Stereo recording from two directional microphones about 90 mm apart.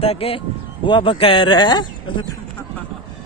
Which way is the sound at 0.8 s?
70° left (ahead or behind).